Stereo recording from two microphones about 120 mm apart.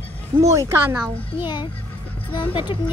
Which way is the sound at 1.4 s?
40° left (ahead or behind).